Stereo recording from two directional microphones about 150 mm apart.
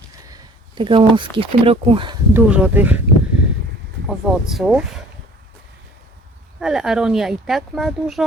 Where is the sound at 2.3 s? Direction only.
10° right (ahead or behind).